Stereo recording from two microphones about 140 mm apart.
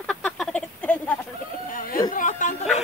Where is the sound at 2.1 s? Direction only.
70° left (ahead or behind).